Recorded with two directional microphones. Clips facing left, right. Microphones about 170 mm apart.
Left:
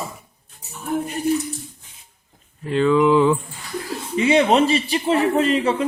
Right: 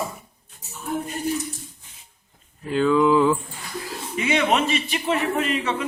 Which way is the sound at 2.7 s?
Centre (ahead or behind).